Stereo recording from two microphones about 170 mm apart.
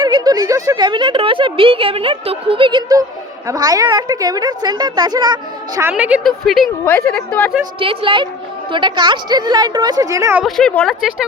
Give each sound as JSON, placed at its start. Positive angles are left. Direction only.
{"t": 0.0, "sound": "speech", "side_deg": -25}
{"t": 5.8, "sound": "a woman's voice", "side_deg": -10}
{"t": 6.8, "sound": "a woman's voice", "side_deg": 15}
{"t": 7.8, "sound": "a woman's voice", "side_deg": -30}
{"t": 10.4, "sound": "a woman's voice", "side_deg": 5}